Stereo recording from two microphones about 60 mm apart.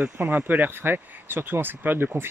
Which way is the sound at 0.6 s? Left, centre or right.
Right.